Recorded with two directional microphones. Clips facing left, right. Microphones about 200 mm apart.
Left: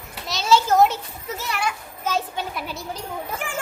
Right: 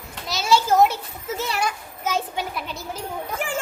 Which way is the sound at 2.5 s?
Centre (ahead or behind).